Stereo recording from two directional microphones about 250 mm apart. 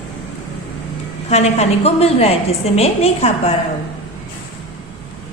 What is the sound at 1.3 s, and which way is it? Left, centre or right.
A woman's voice, left.